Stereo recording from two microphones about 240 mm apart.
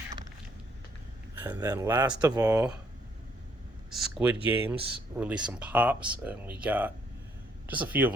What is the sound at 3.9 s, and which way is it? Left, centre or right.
Speech, centre.